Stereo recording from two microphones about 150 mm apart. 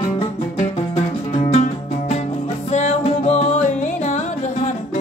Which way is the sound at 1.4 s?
50° left (ahead or behind).